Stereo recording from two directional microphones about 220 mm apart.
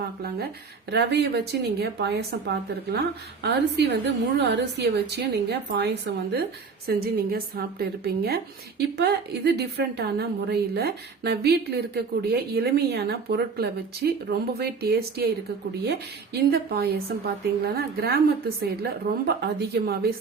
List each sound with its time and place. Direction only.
0.9 s a woman's voice: 50° right (ahead or behind)
19.4 s a woman's voice: 45° right (ahead or behind)